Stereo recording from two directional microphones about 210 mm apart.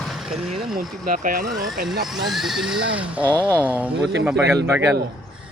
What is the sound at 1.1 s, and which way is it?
Speech, 40° right (ahead or behind).